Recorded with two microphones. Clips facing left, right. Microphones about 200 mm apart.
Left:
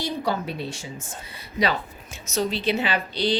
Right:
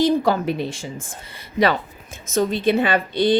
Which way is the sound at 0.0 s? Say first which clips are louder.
Right 9 dB; 90° right.